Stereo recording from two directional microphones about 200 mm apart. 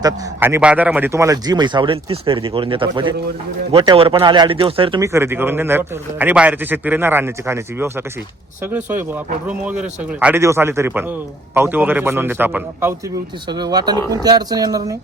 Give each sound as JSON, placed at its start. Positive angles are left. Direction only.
{"t": 0.0, "sound": "a man's voice", "side_deg": -10}
{"t": 5.0, "sound": "a man's voice", "side_deg": -10}
{"t": 13.5, "sound": "a man's voice", "side_deg": -20}